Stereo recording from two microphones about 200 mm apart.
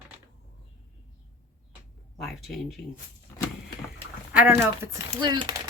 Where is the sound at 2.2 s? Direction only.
Centre (ahead or behind).